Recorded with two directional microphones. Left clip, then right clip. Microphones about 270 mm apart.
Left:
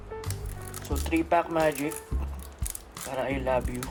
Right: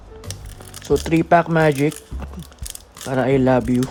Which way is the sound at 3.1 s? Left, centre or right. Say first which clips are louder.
Right 13 dB; right.